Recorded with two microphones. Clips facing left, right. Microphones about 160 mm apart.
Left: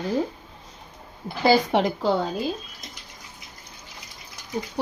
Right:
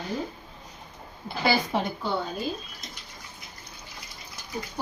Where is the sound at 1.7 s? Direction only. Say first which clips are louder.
Left 6 dB; 90° left.